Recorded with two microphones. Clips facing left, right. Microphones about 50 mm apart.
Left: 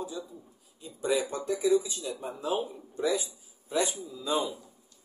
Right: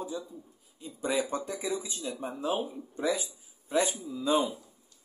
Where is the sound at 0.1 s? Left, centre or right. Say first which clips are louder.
Right 1 dB; right.